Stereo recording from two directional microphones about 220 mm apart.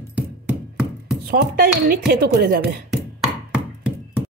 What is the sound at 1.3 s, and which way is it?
Speech, 40° right (ahead or behind).